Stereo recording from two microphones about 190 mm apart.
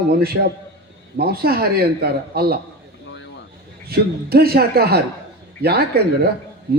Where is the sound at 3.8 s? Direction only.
55° right (ahead or behind).